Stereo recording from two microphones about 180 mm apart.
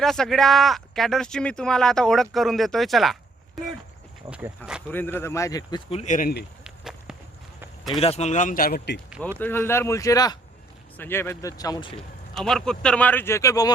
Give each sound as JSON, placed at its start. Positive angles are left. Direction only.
{"t": 0.0, "sound": "speech", "side_deg": 0}
{"t": 4.3, "sound": "speech", "side_deg": -10}
{"t": 4.9, "sound": "speech", "side_deg": 10}
{"t": 5.9, "sound": "speech", "side_deg": 40}
{"t": 6.7, "sound": "walk", "side_deg": -5}
{"t": 7.9, "sound": "speech", "side_deg": 35}
{"t": 9.4, "sound": "speech", "side_deg": 10}
{"t": 12.4, "sound": "speech", "side_deg": 5}